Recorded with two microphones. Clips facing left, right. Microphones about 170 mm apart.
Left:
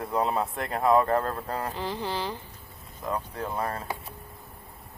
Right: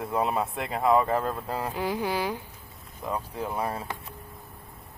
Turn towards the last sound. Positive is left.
turn(degrees=-10)  # may be behind; listen again after turning